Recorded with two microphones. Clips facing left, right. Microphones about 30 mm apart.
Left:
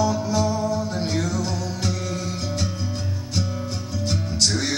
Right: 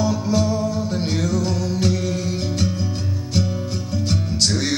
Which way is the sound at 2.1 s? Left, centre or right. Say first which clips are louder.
Right 4 dB; right.